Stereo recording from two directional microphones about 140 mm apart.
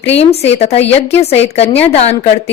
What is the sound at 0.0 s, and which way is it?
A woman's voice, 45° left (ahead or behind).